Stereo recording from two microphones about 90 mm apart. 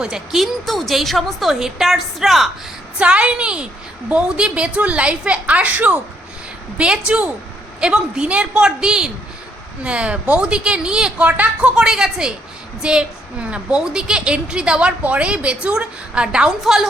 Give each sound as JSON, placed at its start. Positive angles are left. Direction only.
{"t": 0.0, "sound": "a woman's voice", "side_deg": -5}
{"t": 3.0, "sound": "a woman's voice", "side_deg": -15}